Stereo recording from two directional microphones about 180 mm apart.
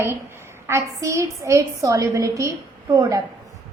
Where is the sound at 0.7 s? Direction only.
15° right (ahead or behind).